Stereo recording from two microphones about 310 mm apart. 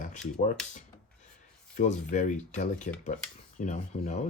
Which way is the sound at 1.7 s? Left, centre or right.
Left.